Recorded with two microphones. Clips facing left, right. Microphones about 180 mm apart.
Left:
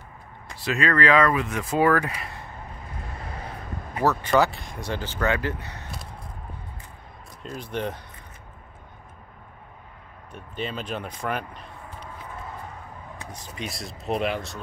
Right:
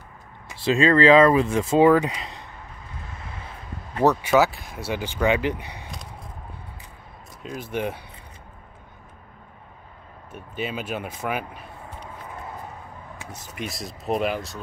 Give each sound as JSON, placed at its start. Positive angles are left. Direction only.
{"t": 0.6, "sound": "speech", "side_deg": -25}
{"t": 3.3, "sound": "vehicle", "side_deg": 40}
{"t": 4.0, "sound": "speech", "side_deg": -15}
{"t": 4.3, "sound": "speech", "side_deg": -5}
{"t": 7.4, "sound": "speech", "side_deg": -5}
{"t": 10.3, "sound": "speech", "side_deg": -5}
{"t": 13.7, "sound": "speech", "side_deg": 0}